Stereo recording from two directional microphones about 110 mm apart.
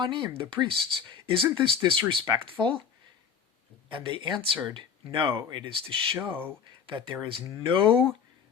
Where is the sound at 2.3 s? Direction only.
30° right (ahead or behind).